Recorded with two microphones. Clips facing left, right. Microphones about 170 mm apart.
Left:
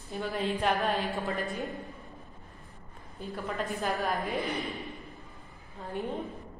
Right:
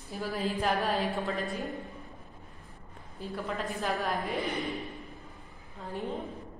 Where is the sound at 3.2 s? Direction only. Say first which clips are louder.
Even; centre (ahead or behind).